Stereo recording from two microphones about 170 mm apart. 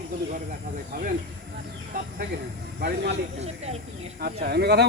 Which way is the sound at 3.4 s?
40° right (ahead or behind).